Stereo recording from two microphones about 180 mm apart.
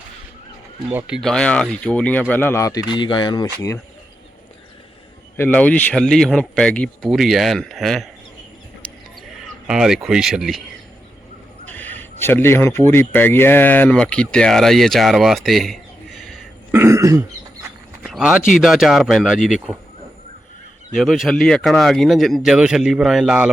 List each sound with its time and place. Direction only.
0.9 s speech: 10° right (ahead or behind)
1.2 s speech: 5° left (ahead or behind); by 3.8 s 20° left (ahead or behind)
5.4 s speech: 10° left (ahead or behind)
9.6 s speech: 5° right (ahead or behind)
11.6 s a sound: 10° left (ahead or behind)
12.2 s speech: 10° left (ahead or behind)
16.7 s throat clearing: 15° right (ahead or behind)
18.0 s speech: centre (ahead or behind)
20.9 s speech: centre (ahead or behind)